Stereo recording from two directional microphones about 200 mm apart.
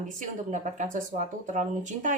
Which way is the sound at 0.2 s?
40° right (ahead or behind).